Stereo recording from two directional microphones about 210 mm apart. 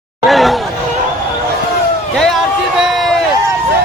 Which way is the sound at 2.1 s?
Centre (ahead or behind).